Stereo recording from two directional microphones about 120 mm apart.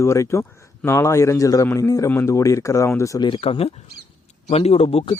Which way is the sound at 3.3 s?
50° left (ahead or behind).